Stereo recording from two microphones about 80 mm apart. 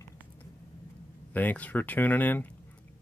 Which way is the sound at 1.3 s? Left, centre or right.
Left.